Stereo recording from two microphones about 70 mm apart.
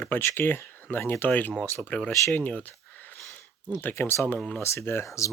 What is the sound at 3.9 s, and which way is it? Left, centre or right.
Speech, left.